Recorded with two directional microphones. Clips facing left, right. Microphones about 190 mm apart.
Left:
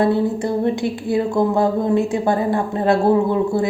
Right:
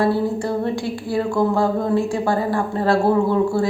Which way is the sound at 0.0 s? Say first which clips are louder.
Left 2 dB; 20° left (ahead or behind).